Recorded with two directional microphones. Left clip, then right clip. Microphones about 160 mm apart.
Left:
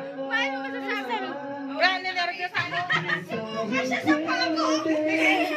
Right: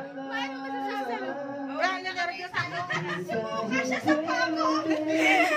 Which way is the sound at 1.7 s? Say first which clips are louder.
Left 5 dB; 10° right (ahead or behind).